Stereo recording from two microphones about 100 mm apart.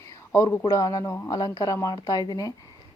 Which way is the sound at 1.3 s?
40° left (ahead or behind).